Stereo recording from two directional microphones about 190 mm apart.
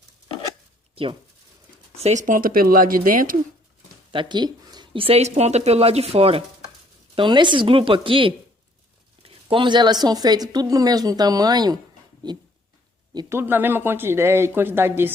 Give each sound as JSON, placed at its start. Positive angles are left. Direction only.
{"t": 1.0, "sound": "speech", "side_deg": -30}
{"t": 4.1, "sound": "a woman's voice", "side_deg": -25}